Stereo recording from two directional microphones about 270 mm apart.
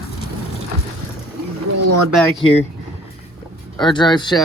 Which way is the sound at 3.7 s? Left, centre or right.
Centre.